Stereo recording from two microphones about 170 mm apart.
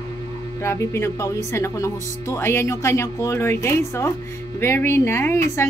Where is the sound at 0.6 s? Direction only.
15° left (ahead or behind).